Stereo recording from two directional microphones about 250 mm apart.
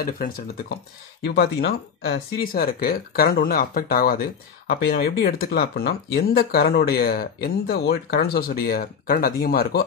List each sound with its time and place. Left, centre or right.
0.0 s speech: left